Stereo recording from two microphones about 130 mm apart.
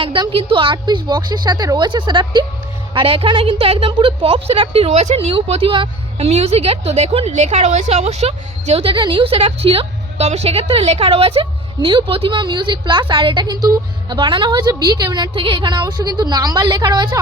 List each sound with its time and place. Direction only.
0.0 s a woman's voice: 40° right (ahead or behind)
14.2 s a woman's voice: 40° right (ahead or behind)